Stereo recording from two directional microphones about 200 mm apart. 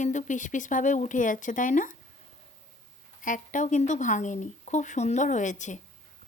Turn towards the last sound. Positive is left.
turn(degrees=40)  # may be behind; listen again after turning